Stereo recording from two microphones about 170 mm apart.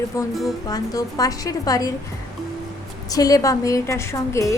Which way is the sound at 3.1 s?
20° left (ahead or behind).